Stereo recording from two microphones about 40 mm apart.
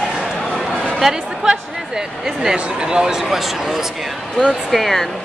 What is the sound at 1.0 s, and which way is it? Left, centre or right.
Music, centre.